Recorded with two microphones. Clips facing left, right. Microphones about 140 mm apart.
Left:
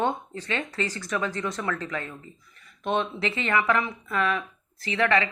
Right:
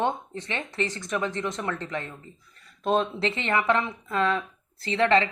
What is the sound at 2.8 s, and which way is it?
Speech, 35° right (ahead or behind).